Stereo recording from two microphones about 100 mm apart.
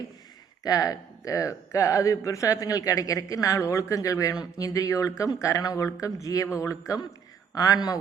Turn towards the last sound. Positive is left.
turn(degrees=40)  # may be behind; listen again after turning